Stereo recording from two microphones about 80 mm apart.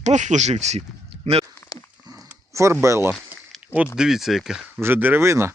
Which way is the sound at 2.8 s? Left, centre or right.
Right.